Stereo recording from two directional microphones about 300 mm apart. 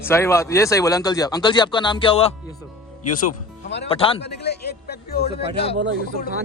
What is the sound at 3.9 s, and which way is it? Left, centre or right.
Speech, centre.